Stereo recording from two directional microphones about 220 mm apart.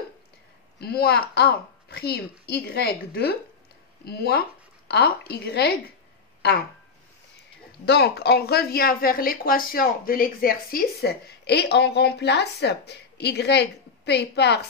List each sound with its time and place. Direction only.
0.7 s speech: 45° left (ahead or behind)
7.8 s speech: 50° left (ahead or behind)